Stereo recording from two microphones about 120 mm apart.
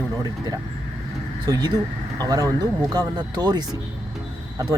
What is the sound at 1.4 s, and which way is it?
Speech, 35° right (ahead or behind).